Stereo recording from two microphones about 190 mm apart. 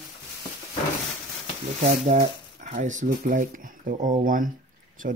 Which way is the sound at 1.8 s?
35° right (ahead or behind).